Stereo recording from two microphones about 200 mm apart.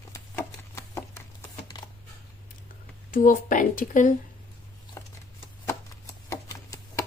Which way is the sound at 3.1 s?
40° left (ahead or behind).